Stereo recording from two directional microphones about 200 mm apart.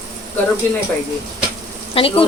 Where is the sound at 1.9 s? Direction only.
25° left (ahead or behind).